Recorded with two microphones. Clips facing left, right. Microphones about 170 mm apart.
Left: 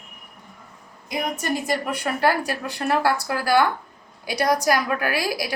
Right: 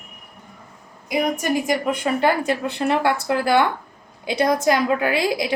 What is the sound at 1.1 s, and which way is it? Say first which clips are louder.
A woman's voice: right 5 dB; 15° right (ahead or behind).